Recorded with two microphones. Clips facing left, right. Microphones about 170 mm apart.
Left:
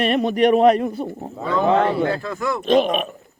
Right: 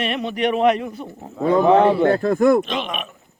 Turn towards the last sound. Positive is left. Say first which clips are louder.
# left 10 dB
turn(degrees=40)  # may be behind; listen again after turning